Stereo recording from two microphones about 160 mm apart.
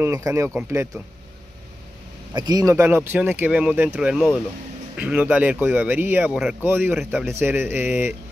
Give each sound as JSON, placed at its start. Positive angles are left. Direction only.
{"t": 0.0, "sound": "speech", "side_deg": -20}
{"t": 2.3, "sound": "a man's voice", "side_deg": -25}
{"t": 2.7, "sound": "speech", "side_deg": -15}